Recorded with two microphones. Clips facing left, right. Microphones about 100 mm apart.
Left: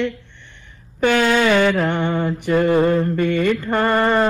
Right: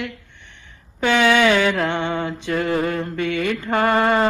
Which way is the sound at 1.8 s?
20° right (ahead or behind).